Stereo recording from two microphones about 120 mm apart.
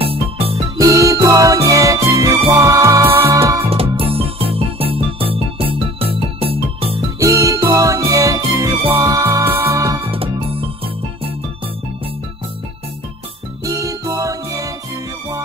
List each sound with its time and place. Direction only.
0.0 s music: 50° right (ahead or behind)
0.7 s music: 30° right (ahead or behind)
3.6 s music: 50° right (ahead or behind)
7.2 s music: 30° right (ahead or behind)
10.1 s music: 50° right (ahead or behind)
13.7 s music: 30° right (ahead or behind)